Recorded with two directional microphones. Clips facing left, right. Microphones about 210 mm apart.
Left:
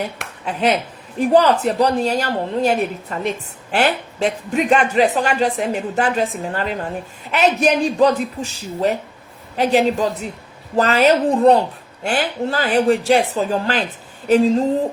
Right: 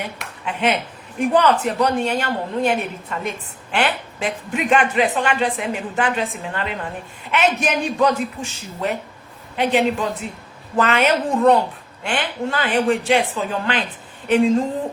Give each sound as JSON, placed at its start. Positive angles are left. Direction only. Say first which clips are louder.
{"t": 0.4, "sound": "a man's voice", "louder": "left 2 dB", "side_deg": 35}